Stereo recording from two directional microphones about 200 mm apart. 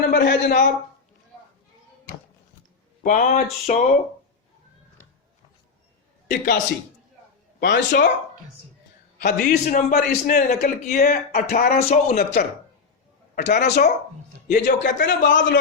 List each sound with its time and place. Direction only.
0.1 s speech: 60° left (ahead or behind)
3.0 s a man's voice: 40° left (ahead or behind)
6.3 s a man's voice: 50° left (ahead or behind)
7.7 s speech: 60° left (ahead or behind)
9.1 s a man's voice: 45° left (ahead or behind)
13.3 s speech: 50° left (ahead or behind)